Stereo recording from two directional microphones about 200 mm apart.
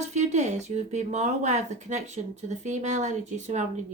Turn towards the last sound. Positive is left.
turn(degrees=-35)  # may be behind; listen again after turning